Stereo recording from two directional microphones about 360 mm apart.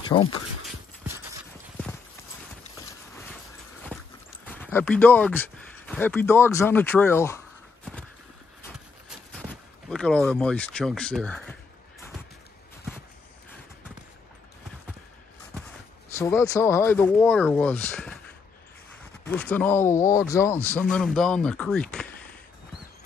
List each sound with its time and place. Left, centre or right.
0.1 s speech: centre
3.9 s a sound: centre
4.5 s speech: centre
8.6 s a sound: centre
16.2 s speech: centre
19.2 s speech: centre